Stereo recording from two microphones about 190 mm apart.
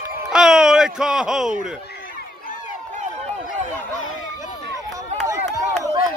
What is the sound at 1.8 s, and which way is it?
Run, 55° left (ahead or behind).